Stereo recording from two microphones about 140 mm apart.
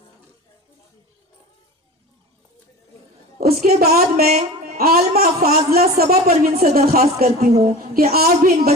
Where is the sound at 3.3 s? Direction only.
80° right.